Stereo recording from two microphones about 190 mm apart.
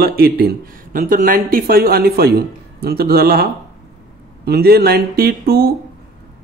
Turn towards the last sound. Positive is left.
turn(degrees=-55)  # may be behind; listen again after turning